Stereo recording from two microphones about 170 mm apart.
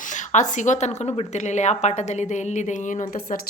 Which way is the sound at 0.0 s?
45° left (ahead or behind).